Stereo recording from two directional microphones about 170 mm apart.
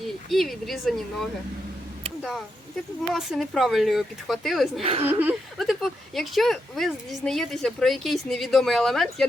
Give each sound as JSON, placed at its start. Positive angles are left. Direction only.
{"t": 0.3, "sound": "a woman's voice", "side_deg": 0}
{"t": 3.1, "sound": "a woman's voice", "side_deg": 0}
{"t": 4.8, "sound": "a woman's voice", "side_deg": -35}
{"t": 5.0, "sound": "chuckle", "side_deg": -10}
{"t": 5.5, "sound": "a woman's voice", "side_deg": 0}